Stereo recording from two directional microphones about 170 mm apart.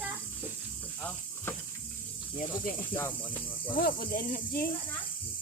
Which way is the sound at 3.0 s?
10° left (ahead or behind).